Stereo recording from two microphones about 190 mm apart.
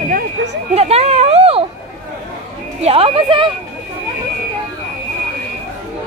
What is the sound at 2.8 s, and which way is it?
Speech, 30° right (ahead or behind).